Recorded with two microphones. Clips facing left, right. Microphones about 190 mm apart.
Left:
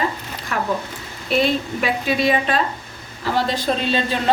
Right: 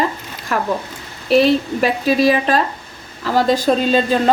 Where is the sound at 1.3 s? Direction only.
35° right (ahead or behind).